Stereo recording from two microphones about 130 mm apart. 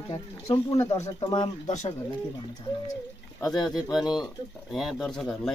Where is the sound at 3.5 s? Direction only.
35° left (ahead or behind).